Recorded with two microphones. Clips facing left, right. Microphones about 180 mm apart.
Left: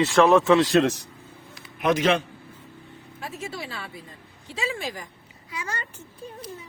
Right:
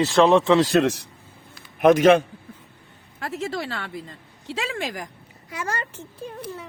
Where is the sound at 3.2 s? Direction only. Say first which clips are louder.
Right 6 dB; 85° right.